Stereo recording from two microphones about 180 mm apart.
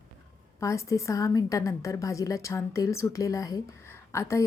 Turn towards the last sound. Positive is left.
turn(degrees=15)  # may be behind; listen again after turning